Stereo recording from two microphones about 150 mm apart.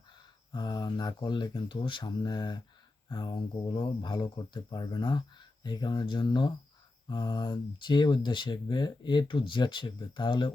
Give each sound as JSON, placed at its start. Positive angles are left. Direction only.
{"t": 0.5, "sound": "speech", "side_deg": 25}